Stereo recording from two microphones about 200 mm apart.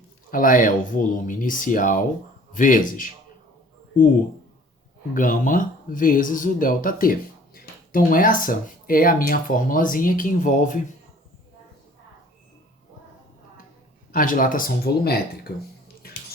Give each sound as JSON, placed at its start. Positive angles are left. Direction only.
{"t": 0.3, "sound": "speech", "side_deg": 45}
{"t": 5.1, "sound": "speech", "side_deg": 40}
{"t": 14.1, "sound": "speech", "side_deg": 45}